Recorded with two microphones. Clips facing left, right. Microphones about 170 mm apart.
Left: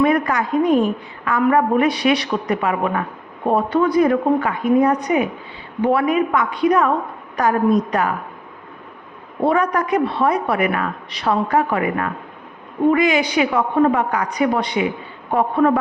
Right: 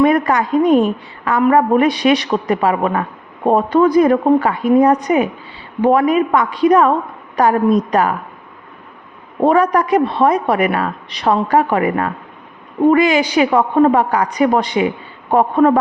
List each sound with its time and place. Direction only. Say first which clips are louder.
0.0 s a woman's voice: right 4 dB; 35° right (ahead or behind)
4.0 s a woman's voice: right 4 dB; 40° right (ahead or behind)
9.4 s a woman's voice: right 5 dB; 40° right (ahead or behind)